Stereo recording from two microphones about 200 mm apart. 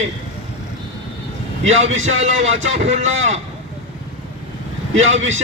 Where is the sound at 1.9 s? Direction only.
75° right (ahead or behind).